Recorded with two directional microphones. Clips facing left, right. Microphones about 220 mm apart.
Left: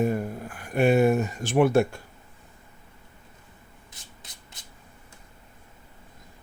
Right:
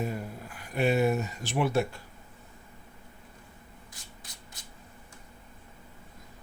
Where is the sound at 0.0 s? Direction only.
50° left (ahead or behind).